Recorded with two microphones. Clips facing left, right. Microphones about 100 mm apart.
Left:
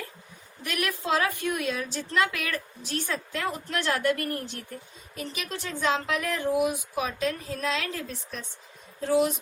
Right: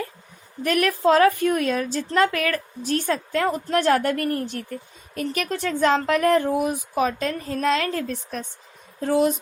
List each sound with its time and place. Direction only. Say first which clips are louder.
0.6 s speech: right 11 dB; 50° right (ahead or behind)
2.0 s speech: right 6 dB; 40° right (ahead or behind)
5.1 s speech: right 9 dB; 60° right (ahead or behind)